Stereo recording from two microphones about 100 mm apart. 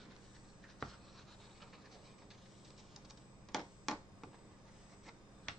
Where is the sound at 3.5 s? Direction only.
Centre (ahead or behind).